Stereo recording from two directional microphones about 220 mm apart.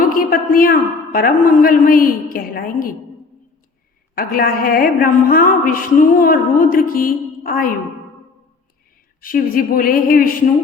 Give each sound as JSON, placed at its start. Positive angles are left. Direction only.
{"t": 0.0, "sound": "a woman's voice", "side_deg": 40}
{"t": 4.1, "sound": "a woman's voice", "side_deg": 40}
{"t": 9.2, "sound": "a woman's voice", "side_deg": 40}